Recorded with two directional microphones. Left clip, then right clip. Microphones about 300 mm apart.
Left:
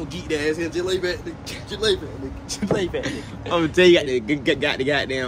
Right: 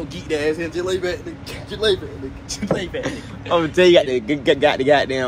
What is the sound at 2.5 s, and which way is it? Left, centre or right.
Speech, centre.